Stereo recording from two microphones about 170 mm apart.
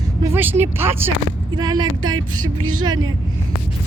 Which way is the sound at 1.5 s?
25° right (ahead or behind).